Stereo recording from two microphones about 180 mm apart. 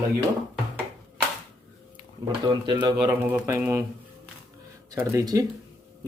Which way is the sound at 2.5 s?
25° right (ahead or behind).